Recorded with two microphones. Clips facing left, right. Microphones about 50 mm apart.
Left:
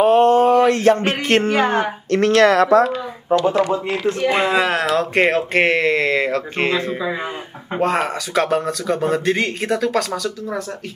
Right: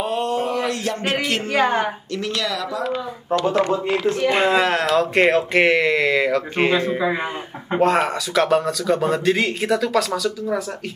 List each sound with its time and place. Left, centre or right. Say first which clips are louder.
0.0 s a sound: left 10 dB; left
2.0 s speech: left 11 dB; left
3.3 s speech: left 3 dB; centre
6.3 s speech: right 1 dB; centre
7.8 s speech: right 1 dB; centre